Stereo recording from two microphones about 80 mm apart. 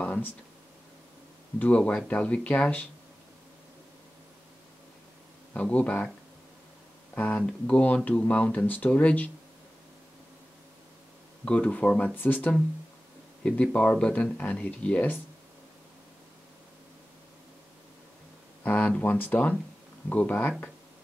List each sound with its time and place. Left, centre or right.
0.0 s a sound: left
2.0 s speech: centre
5.5 s speech: centre
7.2 s speech: centre
11.4 s speech: centre
18.6 s speech: centre